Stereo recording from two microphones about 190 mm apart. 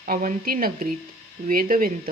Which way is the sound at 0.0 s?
45° right (ahead or behind).